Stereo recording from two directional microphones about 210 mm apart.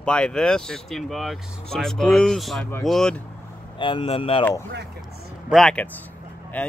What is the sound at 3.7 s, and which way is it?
Speech, 25° left (ahead or behind).